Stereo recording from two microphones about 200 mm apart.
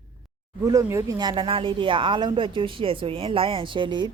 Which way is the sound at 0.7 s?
15° right (ahead or behind).